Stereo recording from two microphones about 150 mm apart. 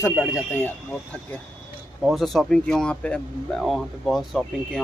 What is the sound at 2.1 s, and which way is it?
Speech, centre (ahead or behind).